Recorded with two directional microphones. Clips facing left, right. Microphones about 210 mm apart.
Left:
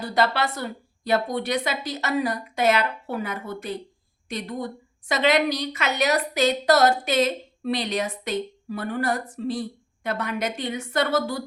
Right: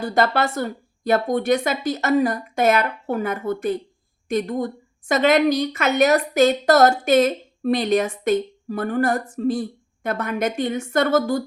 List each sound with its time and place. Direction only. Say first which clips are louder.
0.0 s a woman's voice: right 3 dB; 45° right (ahead or behind)